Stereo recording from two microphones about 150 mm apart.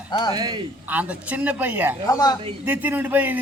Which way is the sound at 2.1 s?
25° left (ahead or behind).